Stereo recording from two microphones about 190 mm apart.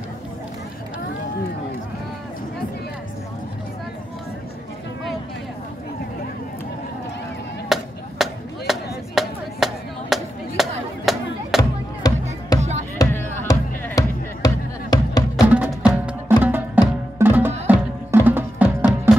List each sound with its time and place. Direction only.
7.7 s chop: centre (ahead or behind)
12.0 s music: 20° left (ahead or behind)
15.9 s music: 5° right (ahead or behind)